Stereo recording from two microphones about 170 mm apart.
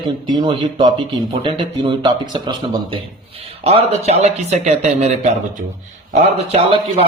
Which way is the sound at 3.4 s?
35° right (ahead or behind).